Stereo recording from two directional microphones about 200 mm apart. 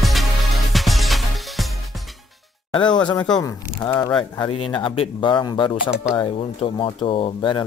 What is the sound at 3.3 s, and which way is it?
Speech, 20° left (ahead or behind).